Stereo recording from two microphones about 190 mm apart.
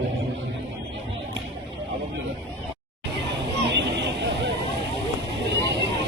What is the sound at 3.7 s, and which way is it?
Vehicle, 65° right (ahead or behind).